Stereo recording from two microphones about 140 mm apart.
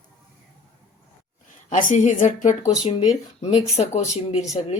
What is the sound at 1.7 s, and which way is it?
A woman's voice, 65° left (ahead or behind).